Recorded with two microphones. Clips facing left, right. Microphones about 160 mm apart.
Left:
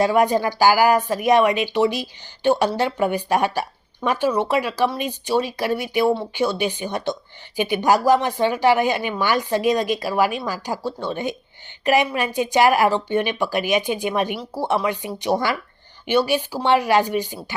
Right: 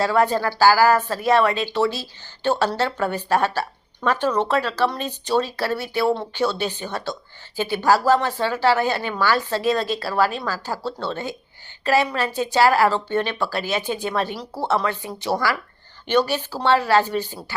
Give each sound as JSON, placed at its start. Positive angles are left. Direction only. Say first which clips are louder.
{"t": 0.0, "sound": "speech", "louder": "left 2 dB", "side_deg": 15}